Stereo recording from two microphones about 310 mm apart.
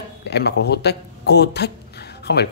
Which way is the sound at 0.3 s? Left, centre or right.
Left.